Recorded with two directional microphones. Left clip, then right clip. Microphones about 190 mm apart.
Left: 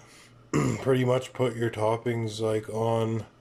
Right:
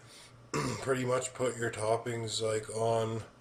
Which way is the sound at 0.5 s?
40° left (ahead or behind).